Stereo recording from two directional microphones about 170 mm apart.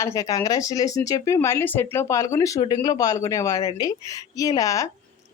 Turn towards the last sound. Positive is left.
turn(degrees=20)  # may be behind; listen again after turning